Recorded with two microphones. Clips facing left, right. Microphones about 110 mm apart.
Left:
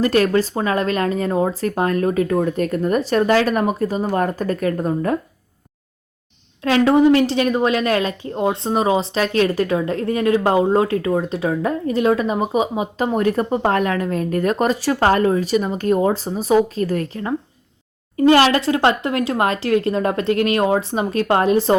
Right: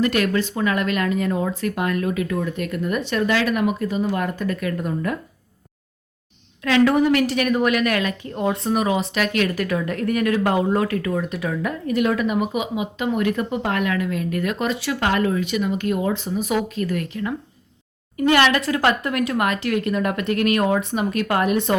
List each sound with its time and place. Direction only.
0.0 s a woman's voice: 35° left (ahead or behind)
6.6 s a woman's voice: 30° left (ahead or behind)